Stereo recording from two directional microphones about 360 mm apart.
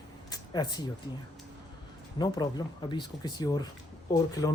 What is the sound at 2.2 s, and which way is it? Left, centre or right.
Speech, centre.